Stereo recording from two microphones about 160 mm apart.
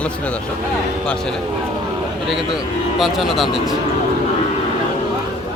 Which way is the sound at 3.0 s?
Centre (ahead or behind).